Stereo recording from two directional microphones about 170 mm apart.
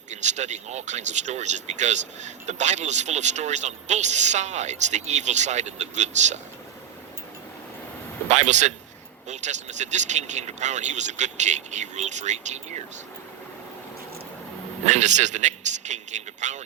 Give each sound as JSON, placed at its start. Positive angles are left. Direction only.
{"t": 0.1, "sound": "speech", "side_deg": -45}
{"t": 8.3, "sound": "a man's voice", "side_deg": -45}
{"t": 14.8, "sound": "speech", "side_deg": -45}